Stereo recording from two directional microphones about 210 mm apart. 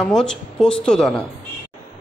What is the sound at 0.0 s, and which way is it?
Speech, 5° left (ahead or behind).